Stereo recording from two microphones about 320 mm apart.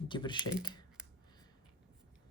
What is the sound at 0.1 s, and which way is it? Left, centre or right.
Speech, centre.